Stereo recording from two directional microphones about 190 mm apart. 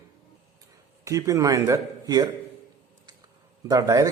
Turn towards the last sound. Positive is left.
turn(degrees=-15)  # may be behind; listen again after turning